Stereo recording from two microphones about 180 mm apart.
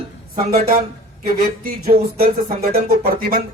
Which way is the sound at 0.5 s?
60° right (ahead or behind).